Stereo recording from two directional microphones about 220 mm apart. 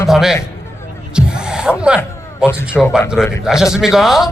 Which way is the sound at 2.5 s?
10° left (ahead or behind).